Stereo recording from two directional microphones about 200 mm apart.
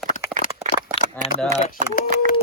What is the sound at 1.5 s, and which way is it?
Speech, 40° left (ahead or behind).